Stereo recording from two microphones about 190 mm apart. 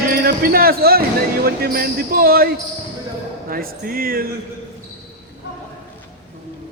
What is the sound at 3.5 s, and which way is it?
Speech, 50° right (ahead or behind).